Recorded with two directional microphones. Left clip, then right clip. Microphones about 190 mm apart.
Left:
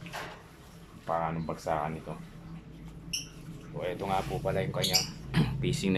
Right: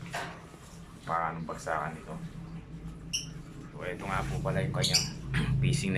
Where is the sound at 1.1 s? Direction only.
20° left (ahead or behind).